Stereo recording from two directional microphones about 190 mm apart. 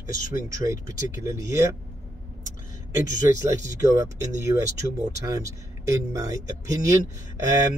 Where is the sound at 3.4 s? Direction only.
15° right (ahead or behind).